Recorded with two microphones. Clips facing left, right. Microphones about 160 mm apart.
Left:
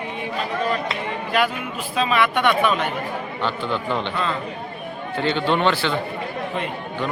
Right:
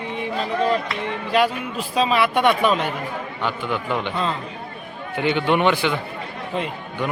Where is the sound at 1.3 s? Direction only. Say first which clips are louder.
Right 3 dB; 35° right (ahead or behind).